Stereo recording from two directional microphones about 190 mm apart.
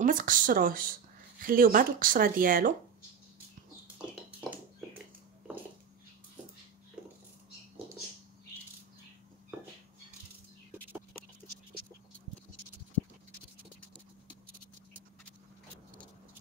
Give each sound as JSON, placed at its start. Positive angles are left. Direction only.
{"t": 0.0, "sound": "speech", "side_deg": -45}